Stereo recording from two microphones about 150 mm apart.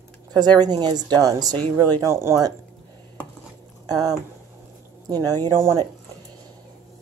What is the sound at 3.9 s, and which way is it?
Speech, 25° right (ahead or behind).